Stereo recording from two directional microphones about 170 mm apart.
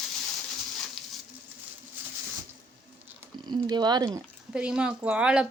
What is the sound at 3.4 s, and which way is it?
Speech, 25° right (ahead or behind).